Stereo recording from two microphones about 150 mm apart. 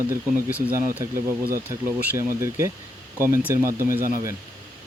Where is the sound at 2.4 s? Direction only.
20° right (ahead or behind).